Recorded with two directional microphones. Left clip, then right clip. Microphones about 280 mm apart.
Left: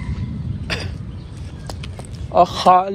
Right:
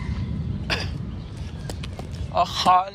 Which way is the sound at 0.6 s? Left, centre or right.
Centre.